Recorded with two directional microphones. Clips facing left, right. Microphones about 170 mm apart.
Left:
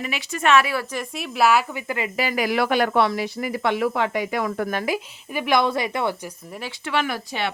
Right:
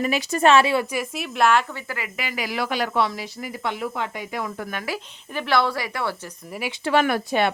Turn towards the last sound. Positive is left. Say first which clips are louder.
# right 5 dB
turn(degrees=-55)  # may be behind; listen again after turning